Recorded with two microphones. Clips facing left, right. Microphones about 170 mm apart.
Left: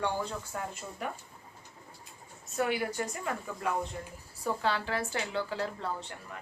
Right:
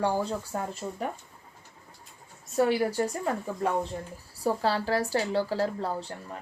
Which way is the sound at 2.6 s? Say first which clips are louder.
Right 7 dB; 35° right (ahead or behind).